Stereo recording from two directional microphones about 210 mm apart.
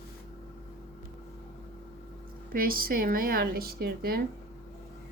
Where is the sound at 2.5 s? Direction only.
45° right (ahead or behind).